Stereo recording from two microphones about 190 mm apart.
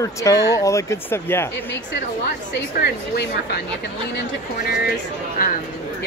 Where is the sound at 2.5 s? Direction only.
60° left (ahead or behind).